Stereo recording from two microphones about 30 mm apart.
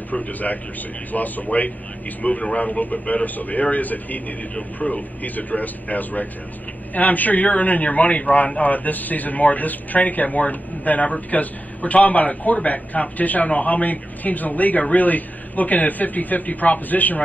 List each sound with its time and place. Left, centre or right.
0.1 s a man's voice: left
2.5 s a man's voice: left
2.8 s a man's voice: left